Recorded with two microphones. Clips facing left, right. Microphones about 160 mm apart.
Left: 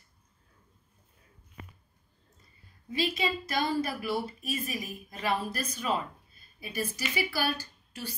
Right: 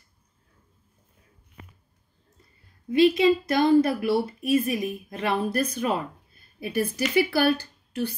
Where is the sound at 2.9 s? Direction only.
60° right (ahead or behind).